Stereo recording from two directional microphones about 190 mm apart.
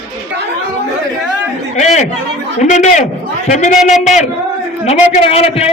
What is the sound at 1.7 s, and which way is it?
Chatter, 35° left (ahead or behind).